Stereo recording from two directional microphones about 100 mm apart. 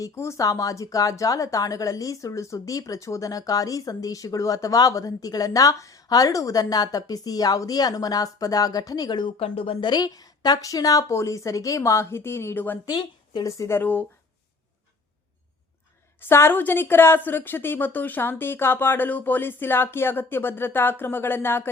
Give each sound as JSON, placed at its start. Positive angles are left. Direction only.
{"t": 0.0, "sound": "a woman's voice", "side_deg": 30}
{"t": 9.4, "sound": "speech", "side_deg": 70}
{"t": 9.8, "sound": "a woman's voice", "side_deg": 45}
{"t": 12.8, "sound": "speech", "side_deg": 45}
{"t": 13.6, "sound": "a woman's voice", "side_deg": 25}
{"t": 16.2, "sound": "a woman's voice", "side_deg": 25}